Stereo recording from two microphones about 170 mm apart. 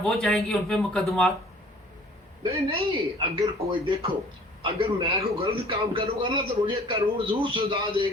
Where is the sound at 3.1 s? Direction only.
25° right (ahead or behind).